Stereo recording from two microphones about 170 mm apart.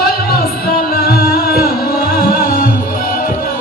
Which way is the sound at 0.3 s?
60° left (ahead or behind).